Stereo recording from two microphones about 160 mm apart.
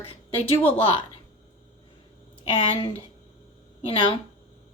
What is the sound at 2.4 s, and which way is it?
Speech, 35° left (ahead or behind).